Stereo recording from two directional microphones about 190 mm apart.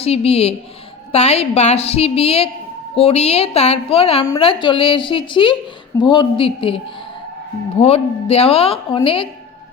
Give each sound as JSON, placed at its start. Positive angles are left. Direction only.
{"t": 0.0, "sound": "a woman's voice", "side_deg": 30}